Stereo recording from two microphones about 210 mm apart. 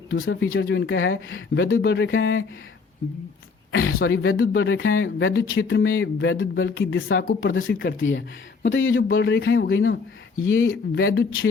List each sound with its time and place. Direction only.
0.1 s speech: 70° left (ahead or behind)
3.7 s speech: 75° left (ahead or behind)